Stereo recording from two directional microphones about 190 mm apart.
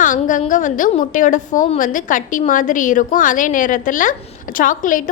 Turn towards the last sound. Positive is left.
turn(degrees=45)  # may be behind; listen again after turning